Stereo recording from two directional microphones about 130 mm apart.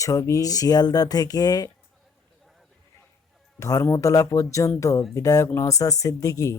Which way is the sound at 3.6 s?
25° left (ahead or behind).